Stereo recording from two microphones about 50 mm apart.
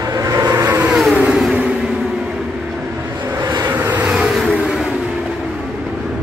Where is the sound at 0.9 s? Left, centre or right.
Centre.